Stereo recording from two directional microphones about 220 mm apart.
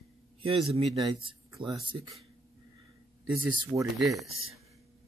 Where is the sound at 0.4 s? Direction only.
25° right (ahead or behind).